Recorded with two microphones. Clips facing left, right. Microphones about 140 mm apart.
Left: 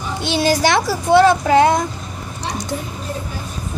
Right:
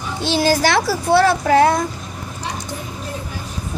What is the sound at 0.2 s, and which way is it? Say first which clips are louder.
Speech: even; 20° left (ahead or behind).